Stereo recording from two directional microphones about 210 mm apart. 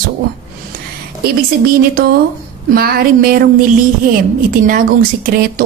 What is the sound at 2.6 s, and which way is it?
Speech, 45° right (ahead or behind).